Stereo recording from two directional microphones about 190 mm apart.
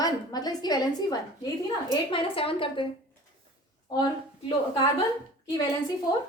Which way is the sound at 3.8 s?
20° left (ahead or behind).